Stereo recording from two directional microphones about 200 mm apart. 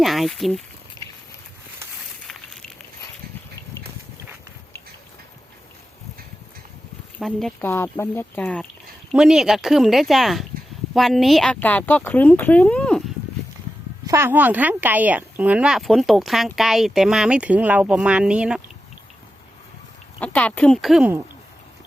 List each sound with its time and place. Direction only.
0.0 s speech: centre (ahead or behind)
1.0 s a sound: 20° left (ahead or behind)
2.2 s a sound: centre (ahead or behind)
7.2 s speech: centre (ahead or behind)
7.7 s speech: 15° left (ahead or behind)
14.1 s speech: 10° right (ahead or behind)
20.1 s speech: 5° left (ahead or behind)